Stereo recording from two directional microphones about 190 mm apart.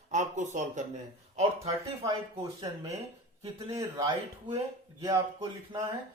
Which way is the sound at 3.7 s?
15° right (ahead or behind).